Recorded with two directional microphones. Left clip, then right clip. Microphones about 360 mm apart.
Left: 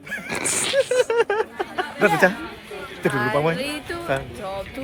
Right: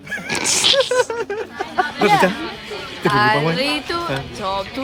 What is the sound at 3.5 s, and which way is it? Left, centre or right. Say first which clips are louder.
Speech: right 7 dB; centre.